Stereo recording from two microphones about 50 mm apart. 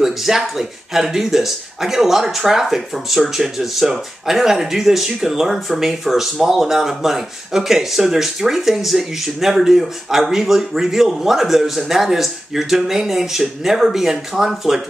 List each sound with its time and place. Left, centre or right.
0.0 s speech: centre